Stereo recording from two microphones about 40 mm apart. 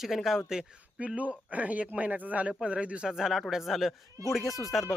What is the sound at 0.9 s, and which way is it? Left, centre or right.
Speech, right.